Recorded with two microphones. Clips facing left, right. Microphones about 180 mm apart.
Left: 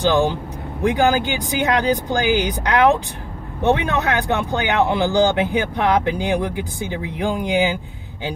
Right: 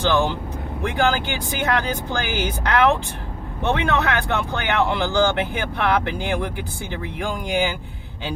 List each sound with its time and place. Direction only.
0.0 s speech: 15° left (ahead or behind)